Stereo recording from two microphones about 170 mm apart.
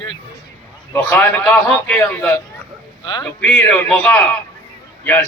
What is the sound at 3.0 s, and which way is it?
Speech, 25° left (ahead or behind).